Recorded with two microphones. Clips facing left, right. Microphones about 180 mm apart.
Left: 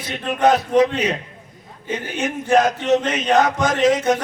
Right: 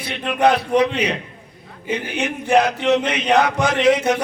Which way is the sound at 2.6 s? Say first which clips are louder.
Right 1 dB; 45° left (ahead or behind).